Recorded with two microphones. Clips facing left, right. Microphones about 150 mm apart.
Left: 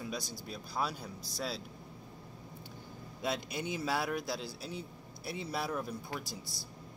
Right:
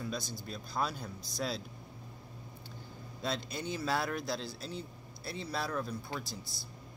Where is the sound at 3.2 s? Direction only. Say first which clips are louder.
Left 1 dB; 15° left (ahead or behind).